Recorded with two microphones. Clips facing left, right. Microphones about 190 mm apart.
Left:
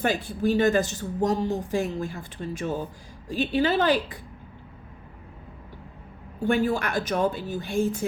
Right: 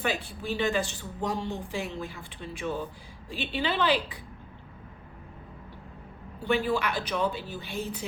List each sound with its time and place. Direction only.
0.0 s speech: 45° left (ahead or behind)
6.4 s speech: 45° left (ahead or behind)